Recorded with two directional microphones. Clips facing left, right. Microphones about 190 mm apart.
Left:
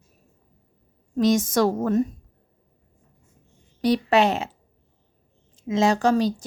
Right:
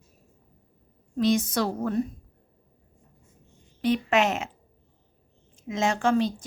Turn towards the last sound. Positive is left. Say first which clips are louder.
# left 3 dB
turn(degrees=35)  # may be behind; listen again after turning